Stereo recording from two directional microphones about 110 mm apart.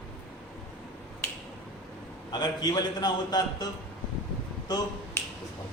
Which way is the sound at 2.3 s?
40° left (ahead or behind).